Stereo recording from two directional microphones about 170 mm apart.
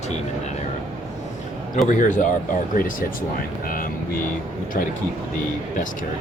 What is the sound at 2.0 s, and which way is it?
Speech, 50° left (ahead or behind).